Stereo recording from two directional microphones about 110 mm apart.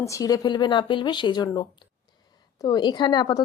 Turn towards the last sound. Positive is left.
turn(degrees=40)  # may be behind; listen again after turning